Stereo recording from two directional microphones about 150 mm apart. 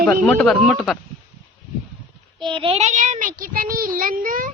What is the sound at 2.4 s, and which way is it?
Child singing, 35° right (ahead or behind).